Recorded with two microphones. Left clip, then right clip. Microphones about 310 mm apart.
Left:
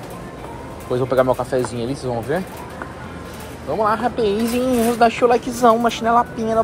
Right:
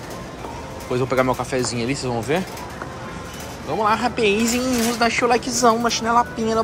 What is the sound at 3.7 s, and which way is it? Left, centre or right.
Speech, centre.